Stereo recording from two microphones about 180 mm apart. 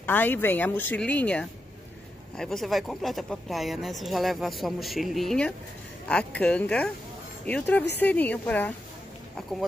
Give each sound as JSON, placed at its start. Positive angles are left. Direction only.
{"t": 0.0, "sound": "a woman's voice", "side_deg": 10}